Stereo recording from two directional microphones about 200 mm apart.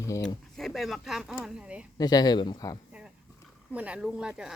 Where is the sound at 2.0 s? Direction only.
20° left (ahead or behind).